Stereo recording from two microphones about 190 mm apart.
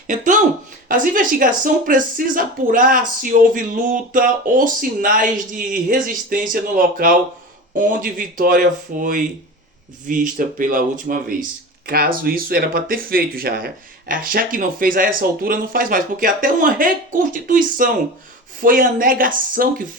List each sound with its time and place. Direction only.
0.9 s speech: 45° right (ahead or behind)